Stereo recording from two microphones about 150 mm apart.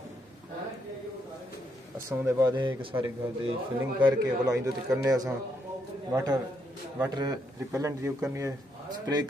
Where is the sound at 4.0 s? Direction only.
25° right (ahead or behind).